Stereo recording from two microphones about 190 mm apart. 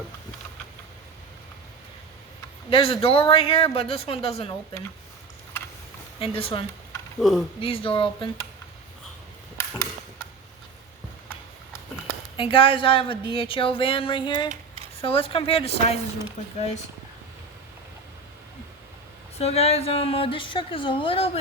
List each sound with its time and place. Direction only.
2.6 s speech: 30° left (ahead or behind)
6.1 s speech: 30° left (ahead or behind)
7.2 s speech: centre (ahead or behind)
7.6 s speech: 30° left (ahead or behind)
9.6 s a sound: 15° left (ahead or behind)
12.4 s speech: 30° left (ahead or behind)
19.4 s speech: 35° left (ahead or behind)